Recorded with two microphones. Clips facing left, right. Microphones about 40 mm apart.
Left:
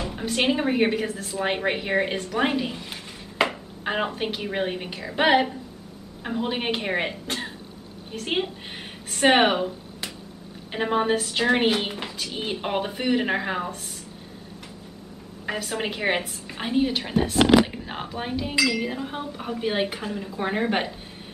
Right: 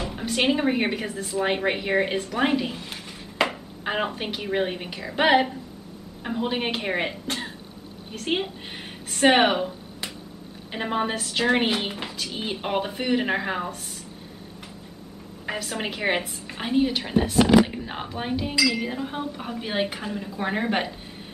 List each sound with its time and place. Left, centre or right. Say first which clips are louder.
0.0 s a woman's voice: even; centre
15.4 s a woman's voice: left 1 dB; centre
17.4 s speech: even; left
17.8 s a woman's voice: right 1 dB; centre